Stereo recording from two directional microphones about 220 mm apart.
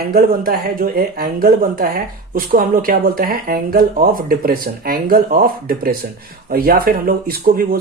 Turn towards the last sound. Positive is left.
turn(degrees=-40)  # may be behind; listen again after turning